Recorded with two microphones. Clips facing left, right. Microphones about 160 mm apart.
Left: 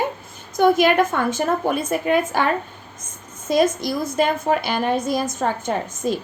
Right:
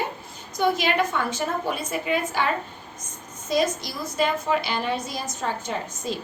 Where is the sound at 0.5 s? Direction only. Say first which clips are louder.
Left 7 dB; 50° left (ahead or behind).